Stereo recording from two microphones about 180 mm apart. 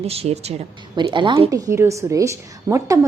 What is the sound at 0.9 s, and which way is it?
A woman's voice, 25° right (ahead or behind).